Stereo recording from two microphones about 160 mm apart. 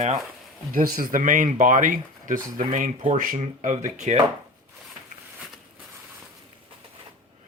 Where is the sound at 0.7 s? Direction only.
60° right (ahead or behind); by 4.2 s 45° right (ahead or behind).